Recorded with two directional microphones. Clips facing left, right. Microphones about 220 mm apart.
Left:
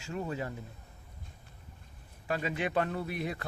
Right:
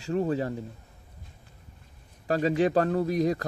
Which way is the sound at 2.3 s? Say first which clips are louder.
Right 9 dB; 40° right (ahead or behind).